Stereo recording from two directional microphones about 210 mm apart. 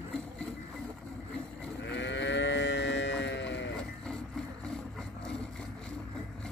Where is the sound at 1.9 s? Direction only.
60° left (ahead or behind).